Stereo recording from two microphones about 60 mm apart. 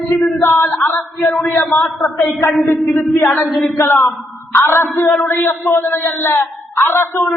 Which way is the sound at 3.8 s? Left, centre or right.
Left.